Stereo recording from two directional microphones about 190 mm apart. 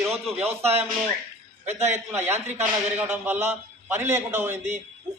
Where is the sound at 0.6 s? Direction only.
35° right (ahead or behind).